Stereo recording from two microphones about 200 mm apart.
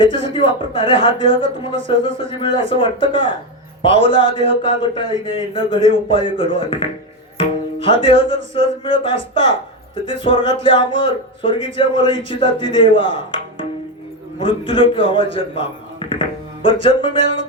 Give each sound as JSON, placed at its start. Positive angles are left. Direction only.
{"t": 0.0, "sound": "speech", "side_deg": 25}
{"t": 7.3, "sound": "tabla", "side_deg": 25}
{"t": 8.5, "sound": "speech", "side_deg": 25}